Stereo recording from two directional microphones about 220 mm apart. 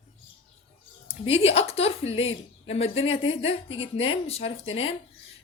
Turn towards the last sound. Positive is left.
turn(degrees=25)  # may be behind; listen again after turning